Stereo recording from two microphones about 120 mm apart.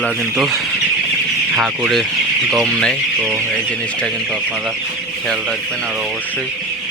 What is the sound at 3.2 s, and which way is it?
Speech, 20° right (ahead or behind).